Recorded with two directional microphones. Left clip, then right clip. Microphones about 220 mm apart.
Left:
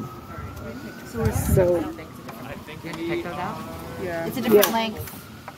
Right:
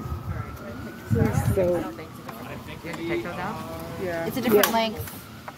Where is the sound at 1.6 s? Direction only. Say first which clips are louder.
Left 3 dB; 25° left (ahead or behind).